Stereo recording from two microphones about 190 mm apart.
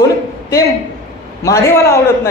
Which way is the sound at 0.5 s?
20° left (ahead or behind).